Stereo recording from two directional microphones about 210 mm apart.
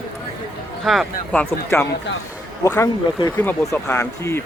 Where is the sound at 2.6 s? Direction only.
15° left (ahead or behind).